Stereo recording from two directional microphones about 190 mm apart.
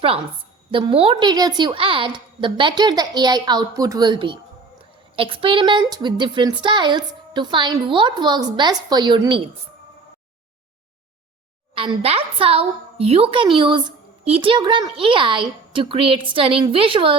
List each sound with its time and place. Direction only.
0.7 s a woman's voice: 25° right (ahead or behind)
11.7 s a woman's voice: 30° right (ahead or behind)